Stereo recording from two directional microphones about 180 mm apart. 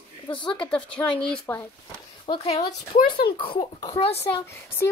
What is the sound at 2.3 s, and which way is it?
A child's voice, 35° left (ahead or behind).